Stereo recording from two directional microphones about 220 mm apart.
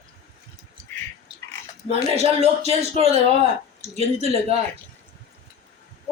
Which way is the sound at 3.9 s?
30° right (ahead or behind).